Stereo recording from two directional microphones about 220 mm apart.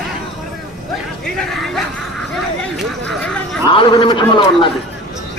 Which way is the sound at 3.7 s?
20° left (ahead or behind).